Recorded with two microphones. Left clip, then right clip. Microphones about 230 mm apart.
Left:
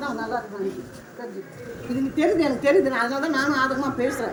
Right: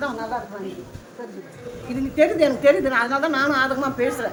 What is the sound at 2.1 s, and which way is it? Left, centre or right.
A woman's voice, centre.